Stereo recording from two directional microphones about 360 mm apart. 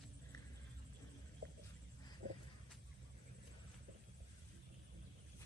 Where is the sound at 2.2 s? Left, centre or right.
Right.